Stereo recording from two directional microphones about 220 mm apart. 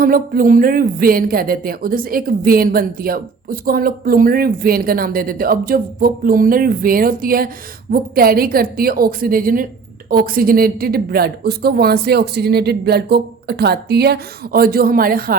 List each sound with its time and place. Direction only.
0.0 s speech: 40° right (ahead or behind)